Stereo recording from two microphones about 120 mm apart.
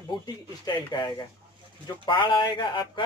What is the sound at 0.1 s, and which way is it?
Speech, 40° left (ahead or behind).